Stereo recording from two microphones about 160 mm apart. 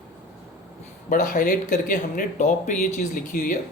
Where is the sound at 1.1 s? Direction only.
60° left (ahead or behind).